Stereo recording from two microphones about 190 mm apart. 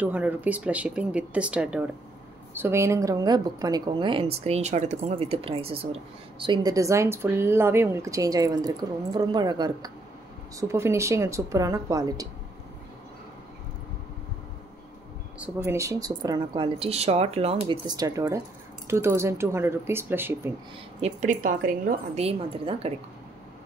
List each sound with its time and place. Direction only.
0.0 s a woman's voice: 10° right (ahead or behind)
15.3 s a woman's voice: 10° right (ahead or behind)
21.0 s a woman's voice: 40° right (ahead or behind)